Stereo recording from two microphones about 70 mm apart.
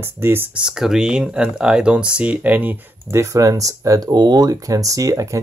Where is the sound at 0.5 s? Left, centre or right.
Centre.